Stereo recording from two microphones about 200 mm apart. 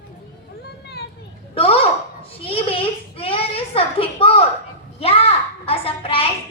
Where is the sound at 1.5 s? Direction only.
30° left (ahead or behind).